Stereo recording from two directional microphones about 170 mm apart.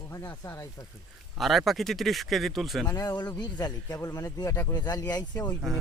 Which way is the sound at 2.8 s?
20° left (ahead or behind).